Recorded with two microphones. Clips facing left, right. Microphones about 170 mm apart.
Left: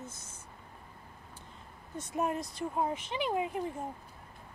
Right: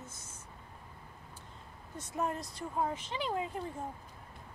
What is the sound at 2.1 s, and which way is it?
Speech, 15° left (ahead or behind).